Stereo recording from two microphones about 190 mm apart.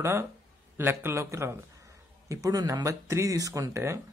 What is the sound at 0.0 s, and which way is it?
Speech, 15° right (ahead or behind).